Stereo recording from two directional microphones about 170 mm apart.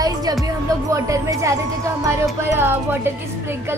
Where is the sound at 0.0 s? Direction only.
20° right (ahead or behind).